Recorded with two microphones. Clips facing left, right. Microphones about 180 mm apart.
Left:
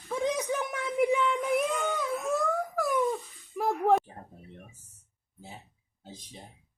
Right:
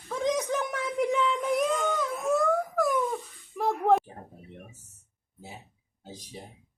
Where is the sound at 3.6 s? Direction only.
Centre (ahead or behind).